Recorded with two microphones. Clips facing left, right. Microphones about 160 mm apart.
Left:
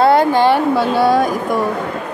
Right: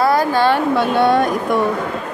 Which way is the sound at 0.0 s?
25° left (ahead or behind).